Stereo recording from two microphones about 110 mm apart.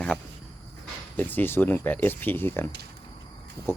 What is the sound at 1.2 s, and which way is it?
Speech, 15° left (ahead or behind).